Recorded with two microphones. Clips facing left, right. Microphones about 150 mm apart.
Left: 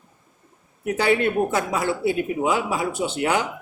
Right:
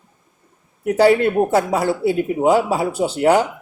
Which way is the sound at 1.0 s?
35° right (ahead or behind).